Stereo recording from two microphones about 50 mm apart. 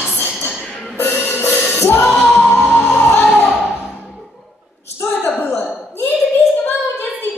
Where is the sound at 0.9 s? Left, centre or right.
Left.